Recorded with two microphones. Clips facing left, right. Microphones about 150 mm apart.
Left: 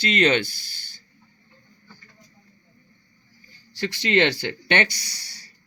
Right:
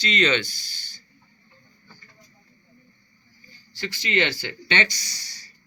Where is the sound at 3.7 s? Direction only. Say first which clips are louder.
Left 4 dB; 70° left (ahead or behind).